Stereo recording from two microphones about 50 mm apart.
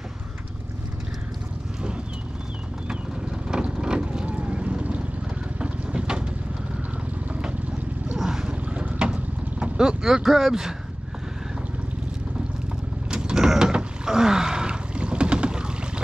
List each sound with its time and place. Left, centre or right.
2.9 s vehicle: centre
8.2 s vehicle: centre
8.5 s vehicle: right; by 10.7 s centre
13.1 s mechanisms: centre